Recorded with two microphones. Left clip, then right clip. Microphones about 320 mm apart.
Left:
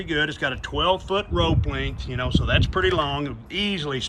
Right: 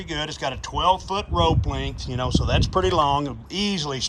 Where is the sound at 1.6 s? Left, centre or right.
Centre.